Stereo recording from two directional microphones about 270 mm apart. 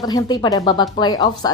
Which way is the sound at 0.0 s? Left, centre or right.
Centre.